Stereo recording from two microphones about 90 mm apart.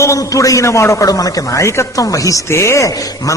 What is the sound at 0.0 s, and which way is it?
A man's voice, 35° left (ahead or behind).